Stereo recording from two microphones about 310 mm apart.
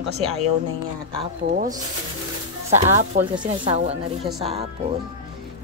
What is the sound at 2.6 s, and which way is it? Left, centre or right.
Speech, right.